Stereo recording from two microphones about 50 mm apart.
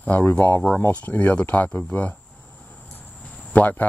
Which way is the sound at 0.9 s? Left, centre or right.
Left.